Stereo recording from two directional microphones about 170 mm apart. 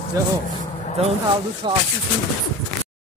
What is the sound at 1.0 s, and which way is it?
Speech, 35° right (ahead or behind).